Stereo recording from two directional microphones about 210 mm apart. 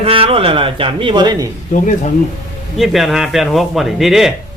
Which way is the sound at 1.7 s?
35° left (ahead or behind).